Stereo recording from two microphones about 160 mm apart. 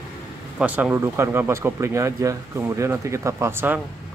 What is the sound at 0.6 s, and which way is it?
Speech, 10° right (ahead or behind).